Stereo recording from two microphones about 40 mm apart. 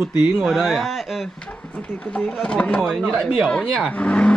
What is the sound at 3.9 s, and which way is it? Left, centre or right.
Speech, left.